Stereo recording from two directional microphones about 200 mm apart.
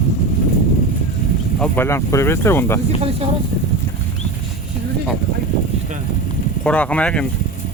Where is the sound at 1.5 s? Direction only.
5° left (ahead or behind).